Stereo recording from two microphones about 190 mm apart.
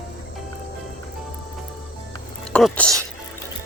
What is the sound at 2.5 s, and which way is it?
Speech, 5° left (ahead or behind).